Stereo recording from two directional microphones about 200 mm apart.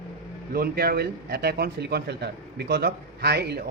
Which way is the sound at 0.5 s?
50° right (ahead or behind).